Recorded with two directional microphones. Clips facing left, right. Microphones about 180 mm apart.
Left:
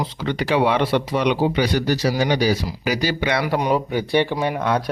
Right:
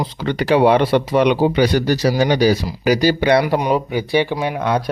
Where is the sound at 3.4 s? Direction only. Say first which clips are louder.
Right 2 dB; 20° right (ahead or behind).